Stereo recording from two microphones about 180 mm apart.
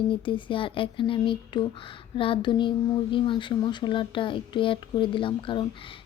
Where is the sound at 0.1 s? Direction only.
30° left (ahead or behind).